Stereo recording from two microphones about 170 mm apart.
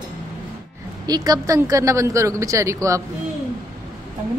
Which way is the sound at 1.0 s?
25° right (ahead or behind).